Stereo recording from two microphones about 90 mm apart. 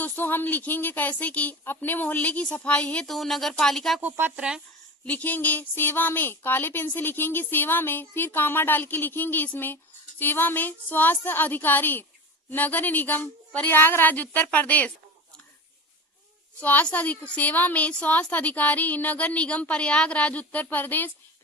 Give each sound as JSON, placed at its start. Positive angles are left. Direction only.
{"t": 0.0, "sound": "speech", "side_deg": 20}
{"t": 3.1, "sound": "speech", "side_deg": 0}
{"t": 4.0, "sound": "speech", "side_deg": -20}
{"t": 5.0, "sound": "speech", "side_deg": 15}
{"t": 16.6, "sound": "a woman's voice", "side_deg": 15}